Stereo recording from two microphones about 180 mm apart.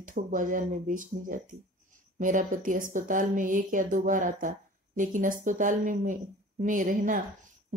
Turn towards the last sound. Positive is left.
turn(degrees=-50)  # may be behind; listen again after turning